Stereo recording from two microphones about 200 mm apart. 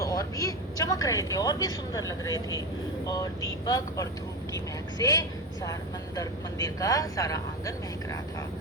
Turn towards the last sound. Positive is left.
turn(degrees=15)  # may be behind; listen again after turning